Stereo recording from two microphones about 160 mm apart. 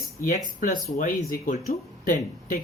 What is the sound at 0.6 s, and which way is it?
Speech, 60° left (ahead or behind).